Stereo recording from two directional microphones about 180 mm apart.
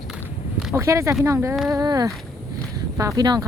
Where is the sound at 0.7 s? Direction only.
15° right (ahead or behind).